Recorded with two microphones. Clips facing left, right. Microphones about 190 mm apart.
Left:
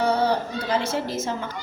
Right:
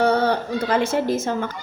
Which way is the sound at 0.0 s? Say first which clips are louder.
Right 3 dB; 60° right (ahead or behind).